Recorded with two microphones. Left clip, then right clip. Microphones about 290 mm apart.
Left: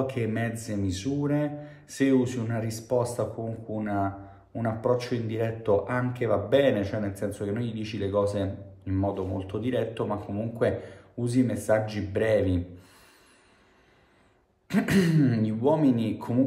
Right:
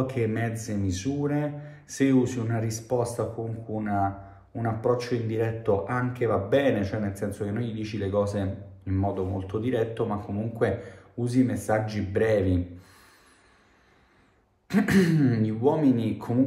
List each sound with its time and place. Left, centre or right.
0.0 s mantra: centre
3.7 s speech: centre
14.7 s mantra: centre